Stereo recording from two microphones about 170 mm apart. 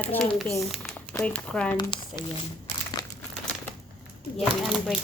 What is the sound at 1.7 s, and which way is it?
Speech, 25° left (ahead or behind).